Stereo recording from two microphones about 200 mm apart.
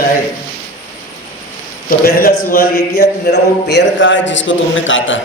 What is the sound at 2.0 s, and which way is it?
A man's voice, 45° left (ahead or behind).